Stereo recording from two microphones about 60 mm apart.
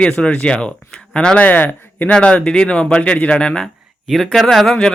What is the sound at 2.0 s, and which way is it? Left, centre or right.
Speech, centre.